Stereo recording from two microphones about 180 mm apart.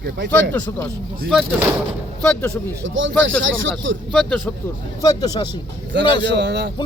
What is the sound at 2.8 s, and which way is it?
Speech, 90° right.